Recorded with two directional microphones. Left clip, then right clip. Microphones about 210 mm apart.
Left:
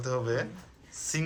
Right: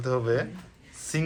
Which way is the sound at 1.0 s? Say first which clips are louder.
Right 2 dB; 10° left (ahead or behind).